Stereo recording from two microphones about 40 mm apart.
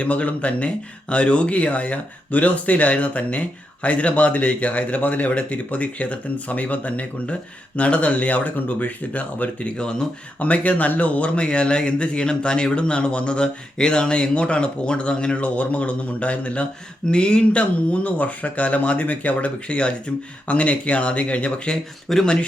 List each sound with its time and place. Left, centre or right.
0.0 s speech: left
10.4 s speech: left
22.1 s speech: centre